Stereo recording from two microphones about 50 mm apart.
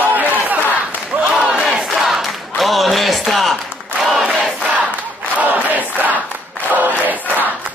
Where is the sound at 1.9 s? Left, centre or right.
Centre.